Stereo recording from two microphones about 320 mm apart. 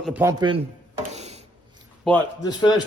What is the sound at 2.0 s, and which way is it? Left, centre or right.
Speech, centre.